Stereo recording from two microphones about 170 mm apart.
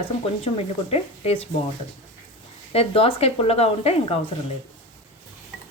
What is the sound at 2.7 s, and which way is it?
Speech, 35° left (ahead or behind).